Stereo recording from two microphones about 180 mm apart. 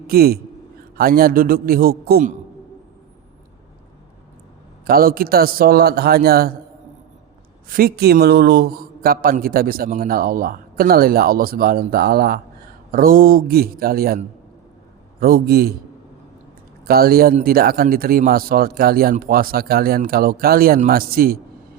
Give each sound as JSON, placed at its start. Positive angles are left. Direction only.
{"t": 0.1, "sound": "a man's voice", "side_deg": -60}
{"t": 4.9, "sound": "a man's voice", "side_deg": -55}
{"t": 7.7, "sound": "a man's voice", "side_deg": -55}
{"t": 15.2, "sound": "a man's voice", "side_deg": -60}
{"t": 16.8, "sound": "a man's voice", "side_deg": -55}